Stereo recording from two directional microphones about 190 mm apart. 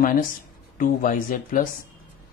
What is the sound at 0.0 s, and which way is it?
Speech, 45° left (ahead or behind).